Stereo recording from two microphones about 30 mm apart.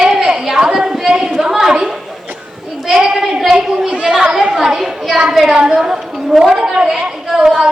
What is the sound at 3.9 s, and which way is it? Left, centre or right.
Speech, right.